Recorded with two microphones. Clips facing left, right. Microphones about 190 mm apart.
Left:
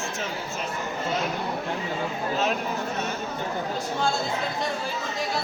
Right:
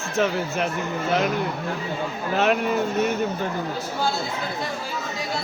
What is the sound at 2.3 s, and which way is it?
Speech, 70° right (ahead or behind).